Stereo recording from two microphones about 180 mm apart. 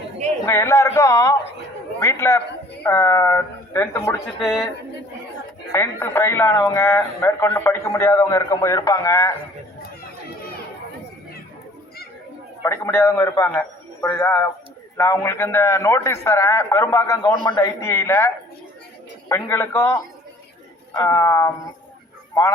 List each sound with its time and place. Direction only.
0.4 s speech: 15° left (ahead or behind)
4.4 s speech: 5° right (ahead or behind)
5.7 s speech: 15° left (ahead or behind)
12.6 s speech: 15° left (ahead or behind)
19.3 s speech: 15° left (ahead or behind)